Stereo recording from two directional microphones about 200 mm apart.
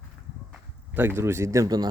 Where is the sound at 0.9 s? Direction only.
10° right (ahead or behind).